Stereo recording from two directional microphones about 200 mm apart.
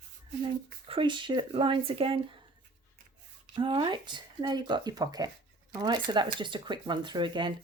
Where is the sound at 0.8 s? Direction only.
25° right (ahead or behind).